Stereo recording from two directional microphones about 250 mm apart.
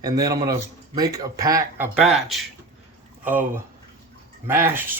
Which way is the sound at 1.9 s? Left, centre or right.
Centre.